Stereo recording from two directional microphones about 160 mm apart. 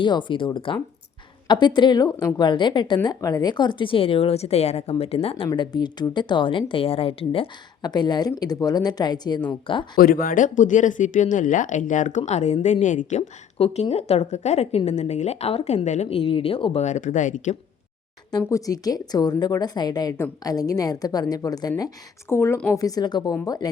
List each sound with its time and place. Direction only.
0.0 s a woman's voice: 30° left (ahead or behind)
5.5 s a woman's voice: 25° left (ahead or behind)
10.0 s a woman's voice: 65° left (ahead or behind); by 16.8 s 35° left (ahead or behind)
16.8 s speech: 50° left (ahead or behind)
18.3 s a woman's voice: 20° left (ahead or behind)
22.8 s a woman's voice: 25° left (ahead or behind)